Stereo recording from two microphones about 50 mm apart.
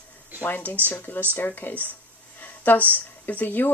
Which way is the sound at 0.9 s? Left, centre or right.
Left.